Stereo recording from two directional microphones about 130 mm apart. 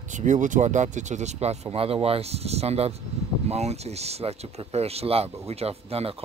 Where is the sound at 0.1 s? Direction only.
70° right (ahead or behind).